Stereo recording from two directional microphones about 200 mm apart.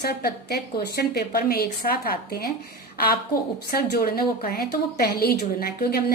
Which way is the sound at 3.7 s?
50° left (ahead or behind).